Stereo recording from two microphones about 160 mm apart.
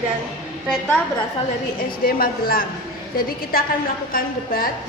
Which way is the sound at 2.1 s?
70° left (ahead or behind).